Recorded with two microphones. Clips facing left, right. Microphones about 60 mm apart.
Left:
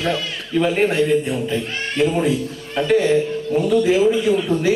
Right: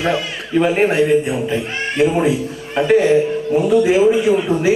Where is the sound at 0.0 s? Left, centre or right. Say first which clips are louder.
Right 3 dB; right.